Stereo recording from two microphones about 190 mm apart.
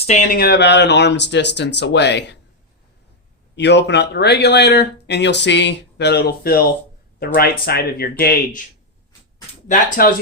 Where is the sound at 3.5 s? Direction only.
65° left (ahead or behind).